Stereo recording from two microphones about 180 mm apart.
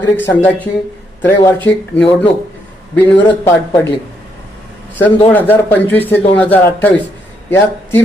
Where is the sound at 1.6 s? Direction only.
10° left (ahead or behind).